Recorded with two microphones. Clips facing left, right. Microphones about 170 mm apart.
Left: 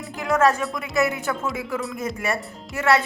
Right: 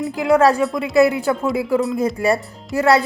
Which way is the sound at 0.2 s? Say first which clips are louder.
Right 5 dB; 30° right (ahead or behind).